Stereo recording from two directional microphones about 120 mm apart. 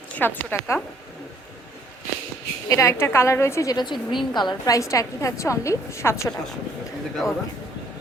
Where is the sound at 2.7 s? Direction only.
25° left (ahead or behind).